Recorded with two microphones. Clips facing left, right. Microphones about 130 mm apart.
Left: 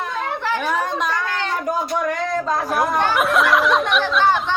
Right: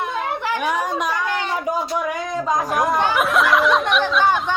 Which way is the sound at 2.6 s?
Centre (ahead or behind).